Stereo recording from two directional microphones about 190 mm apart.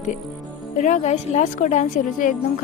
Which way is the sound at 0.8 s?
35° left (ahead or behind).